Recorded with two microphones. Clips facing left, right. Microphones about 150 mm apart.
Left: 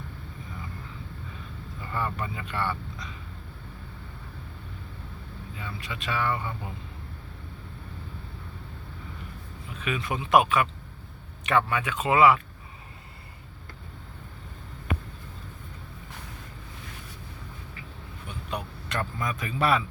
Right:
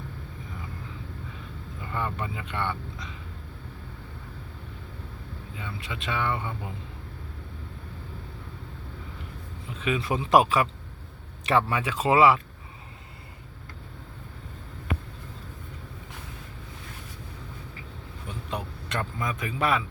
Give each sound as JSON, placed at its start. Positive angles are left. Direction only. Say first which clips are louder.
{"t": 1.8, "sound": "speech", "louder": "even", "side_deg": -15}
{"t": 5.5, "sound": "speech", "louder": "right 1 dB", "side_deg": -20}
{"t": 9.6, "sound": "speech", "louder": "right 3 dB", "side_deg": -25}
{"t": 18.3, "sound": "vehicle", "louder": "right 1 dB", "side_deg": -25}